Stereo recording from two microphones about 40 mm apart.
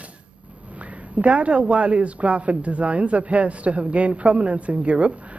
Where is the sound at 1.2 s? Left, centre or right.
Right.